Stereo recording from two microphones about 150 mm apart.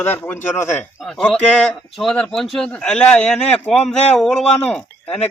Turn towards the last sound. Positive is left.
turn(degrees=5)  # may be behind; listen again after turning